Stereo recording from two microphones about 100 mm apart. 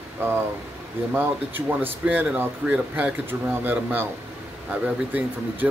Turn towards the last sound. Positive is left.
turn(degrees=-15)  # may be behind; listen again after turning